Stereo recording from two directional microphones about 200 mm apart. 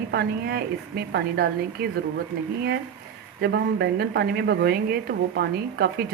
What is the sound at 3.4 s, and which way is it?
A woman's voice, 55° right (ahead or behind).